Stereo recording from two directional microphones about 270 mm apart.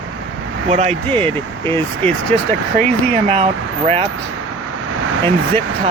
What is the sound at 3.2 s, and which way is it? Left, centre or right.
Speech, right.